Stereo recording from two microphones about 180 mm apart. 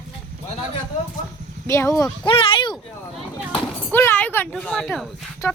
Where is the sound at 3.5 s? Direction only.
10° left (ahead or behind).